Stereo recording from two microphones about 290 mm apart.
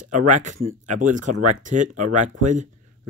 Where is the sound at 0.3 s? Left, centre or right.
Right.